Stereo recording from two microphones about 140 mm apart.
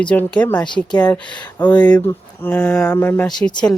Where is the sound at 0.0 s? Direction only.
10° left (ahead or behind).